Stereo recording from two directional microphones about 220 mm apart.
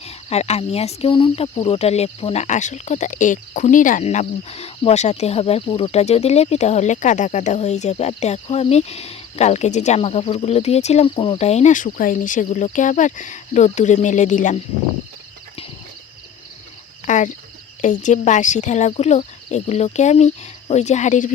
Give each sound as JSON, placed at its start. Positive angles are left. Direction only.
{"t": 0.0, "sound": "speech", "side_deg": 30}
{"t": 17.1, "sound": "speech", "side_deg": 35}